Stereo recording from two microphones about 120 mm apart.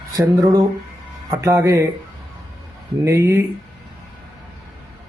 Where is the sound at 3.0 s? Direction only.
25° right (ahead or behind).